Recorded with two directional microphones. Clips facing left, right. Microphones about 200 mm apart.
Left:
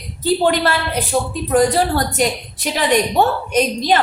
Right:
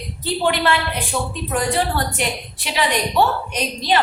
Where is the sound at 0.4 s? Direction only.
40° left (ahead or behind).